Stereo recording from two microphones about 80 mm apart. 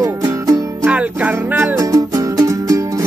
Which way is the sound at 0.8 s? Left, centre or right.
Centre.